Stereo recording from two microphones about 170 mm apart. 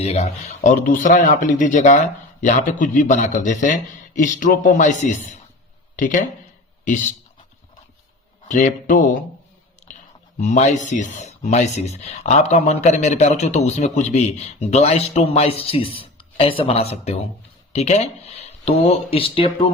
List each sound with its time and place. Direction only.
0.0 s a man's voice: 40° left (ahead or behind)
8.4 s a man's voice: 45° left (ahead or behind)
10.4 s speech: 45° left (ahead or behind)